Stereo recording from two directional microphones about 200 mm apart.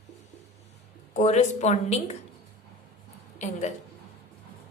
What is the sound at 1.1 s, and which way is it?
A woman's voice, 35° left (ahead or behind).